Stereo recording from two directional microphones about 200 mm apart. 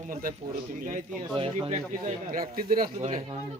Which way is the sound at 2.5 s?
45° right (ahead or behind).